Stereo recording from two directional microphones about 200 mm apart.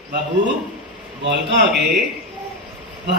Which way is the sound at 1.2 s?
60° right (ahead or behind).